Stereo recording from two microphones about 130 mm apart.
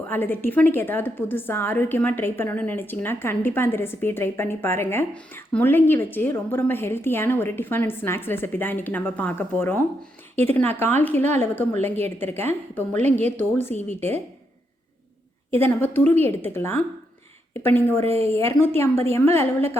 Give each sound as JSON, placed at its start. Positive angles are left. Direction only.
{"t": 0.1, "sound": "a woman's voice", "side_deg": 15}
{"t": 15.4, "sound": "a woman's voice", "side_deg": 15}
{"t": 18.0, "sound": "a woman's voice", "side_deg": -55}
{"t": 18.3, "sound": "a woman's voice", "side_deg": 20}